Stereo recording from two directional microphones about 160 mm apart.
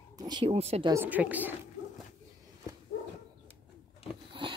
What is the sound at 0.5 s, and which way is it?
Speech, 40° right (ahead or behind).